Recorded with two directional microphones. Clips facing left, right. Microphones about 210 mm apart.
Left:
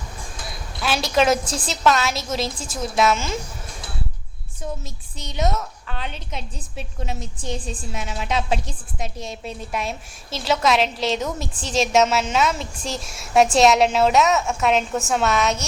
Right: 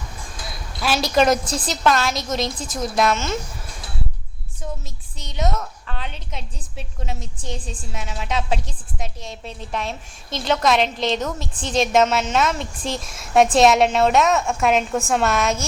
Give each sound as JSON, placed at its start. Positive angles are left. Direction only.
{"t": 0.8, "sound": "a woman's voice", "side_deg": 0}
{"t": 5.1, "sound": "a woman's voice", "side_deg": 0}